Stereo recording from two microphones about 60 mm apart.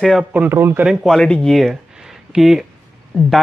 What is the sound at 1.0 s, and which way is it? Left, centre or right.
A man's voice, centre.